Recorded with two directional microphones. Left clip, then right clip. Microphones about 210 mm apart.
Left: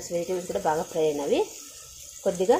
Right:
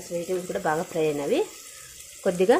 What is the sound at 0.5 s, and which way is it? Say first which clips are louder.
Speech: left 1 dB; 15° right (ahead or behind).